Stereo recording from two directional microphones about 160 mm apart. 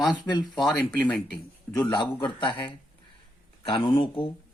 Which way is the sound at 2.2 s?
30° left (ahead or behind).